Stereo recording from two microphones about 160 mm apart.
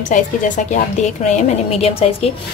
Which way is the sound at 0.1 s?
50° left (ahead or behind).